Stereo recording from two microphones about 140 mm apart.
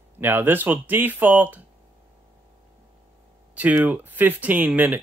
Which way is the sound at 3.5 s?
10° right (ahead or behind).